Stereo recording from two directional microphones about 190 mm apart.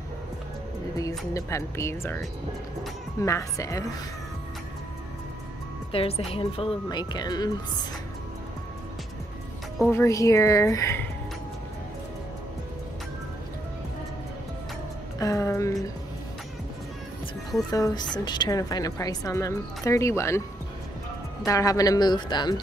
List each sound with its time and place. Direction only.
0.9 s a woman's voice: 15° left (ahead or behind)
3.3 s a woman's voice: 15° left (ahead or behind)
5.9 s speech: 30° left (ahead or behind)
9.8 s a woman's voice: 15° left (ahead or behind)
15.1 s a woman's voice: 15° left (ahead or behind)
17.6 s a woman's voice: 20° left (ahead or behind)
21.5 s speech: 15° left (ahead or behind)